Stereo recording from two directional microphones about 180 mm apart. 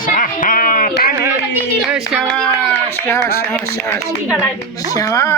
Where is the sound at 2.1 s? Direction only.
Centre (ahead or behind).